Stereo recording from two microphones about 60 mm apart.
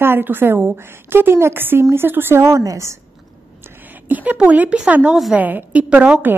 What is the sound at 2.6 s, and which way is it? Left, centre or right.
Speech, right.